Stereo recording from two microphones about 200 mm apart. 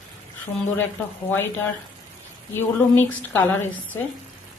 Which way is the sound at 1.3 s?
10° left (ahead or behind).